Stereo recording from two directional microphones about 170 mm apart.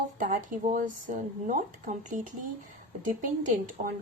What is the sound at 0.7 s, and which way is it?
A woman's voice, 50° right (ahead or behind).